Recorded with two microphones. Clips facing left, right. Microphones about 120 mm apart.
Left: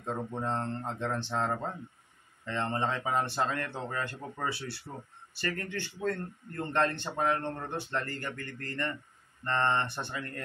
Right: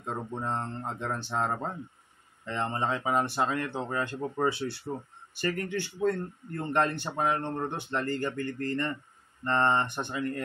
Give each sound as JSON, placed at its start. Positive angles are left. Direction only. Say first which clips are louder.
{"t": 0.0, "sound": "speech", "louder": "even", "side_deg": -15}